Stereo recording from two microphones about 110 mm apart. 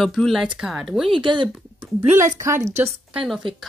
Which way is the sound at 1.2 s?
45° right (ahead or behind).